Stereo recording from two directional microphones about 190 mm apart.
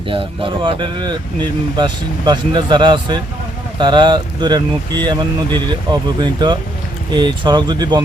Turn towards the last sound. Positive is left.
turn(degrees=-20)  # may be behind; listen again after turning